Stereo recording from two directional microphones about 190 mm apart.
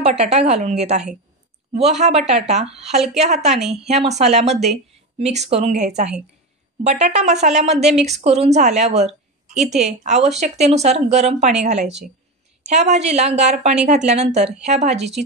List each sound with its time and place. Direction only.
0.3 s a woman's voice: 35° right (ahead or behind)
9.6 s a woman's voice: 5° right (ahead or behind)
10.0 s speech: 35° right (ahead or behind)